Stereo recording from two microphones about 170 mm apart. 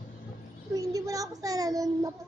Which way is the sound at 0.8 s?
20° right (ahead or behind).